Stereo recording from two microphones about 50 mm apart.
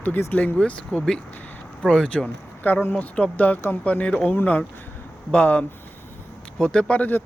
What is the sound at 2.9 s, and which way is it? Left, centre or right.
Speech, left.